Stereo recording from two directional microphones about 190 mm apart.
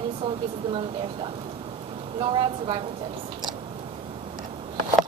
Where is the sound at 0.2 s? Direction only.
25° right (ahead or behind).